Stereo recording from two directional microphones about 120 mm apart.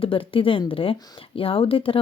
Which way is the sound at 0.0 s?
50° left (ahead or behind).